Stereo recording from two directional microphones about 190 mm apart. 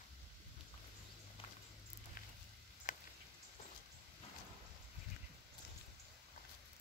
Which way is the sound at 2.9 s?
40° left (ahead or behind).